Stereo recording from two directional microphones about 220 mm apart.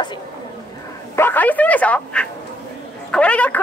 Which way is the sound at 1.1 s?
10° left (ahead or behind).